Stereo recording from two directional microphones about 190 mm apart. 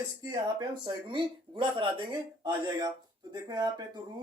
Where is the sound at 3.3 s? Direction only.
20° right (ahead or behind).